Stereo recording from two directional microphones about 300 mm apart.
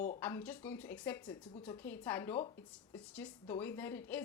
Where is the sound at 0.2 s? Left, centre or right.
Centre.